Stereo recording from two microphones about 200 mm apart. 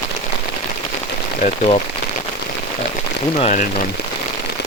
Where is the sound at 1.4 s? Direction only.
35° left (ahead or behind).